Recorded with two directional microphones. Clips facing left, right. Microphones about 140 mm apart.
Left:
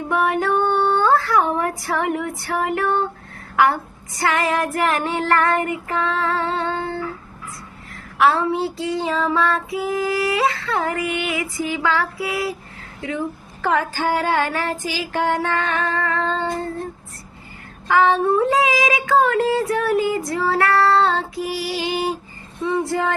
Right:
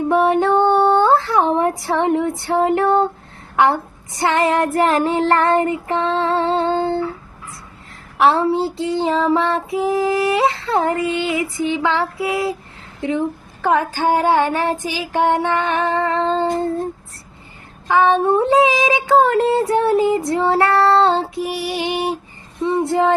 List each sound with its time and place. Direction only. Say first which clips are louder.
0.1 s female singing: right 4 dB; 30° right (ahead or behind)
3.5 s child singing: right 2 dB; 25° right (ahead or behind)
8.2 s child singing: right 3 dB; 30° right (ahead or behind)
17.8 s child singing: right 2 dB; 20° right (ahead or behind)